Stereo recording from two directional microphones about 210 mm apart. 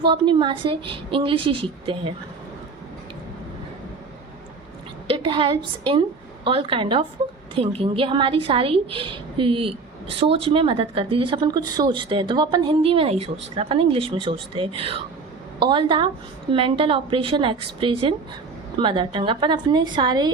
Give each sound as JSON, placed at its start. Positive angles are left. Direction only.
{"t": 0.0, "sound": "a woman's voice", "side_deg": -25}
{"t": 5.0, "sound": "a woman's voice", "side_deg": -25}